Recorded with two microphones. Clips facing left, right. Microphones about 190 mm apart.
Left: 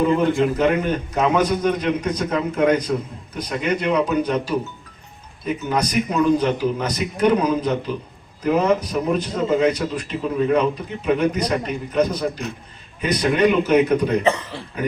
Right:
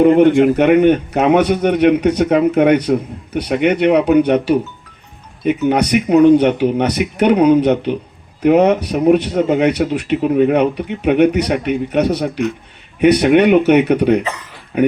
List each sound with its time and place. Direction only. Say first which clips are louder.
0.0 s a man's voice: right 8 dB; 65° right (ahead or behind)